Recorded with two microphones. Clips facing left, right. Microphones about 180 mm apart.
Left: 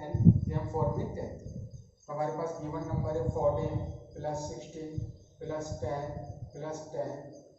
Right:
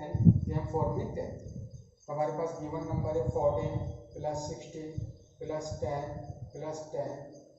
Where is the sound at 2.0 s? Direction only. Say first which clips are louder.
Right 1 dB; 20° right (ahead or behind).